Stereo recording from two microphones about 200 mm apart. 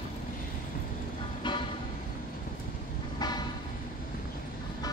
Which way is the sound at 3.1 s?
20° left (ahead or behind).